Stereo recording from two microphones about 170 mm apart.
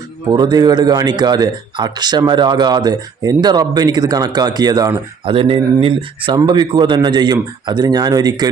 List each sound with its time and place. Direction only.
0.3 s speech: 25° right (ahead or behind)